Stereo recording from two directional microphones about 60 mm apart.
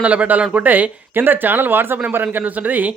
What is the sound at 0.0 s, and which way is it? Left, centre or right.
A man's voice, right.